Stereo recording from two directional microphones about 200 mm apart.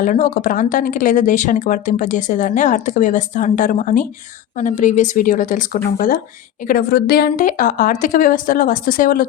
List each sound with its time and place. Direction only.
0.0 s a woman's voice: 40° left (ahead or behind)